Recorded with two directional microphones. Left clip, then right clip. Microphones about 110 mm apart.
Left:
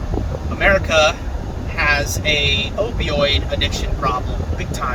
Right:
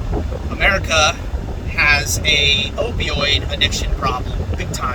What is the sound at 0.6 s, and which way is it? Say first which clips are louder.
Boat: left 1 dB; 30° right (ahead or behind).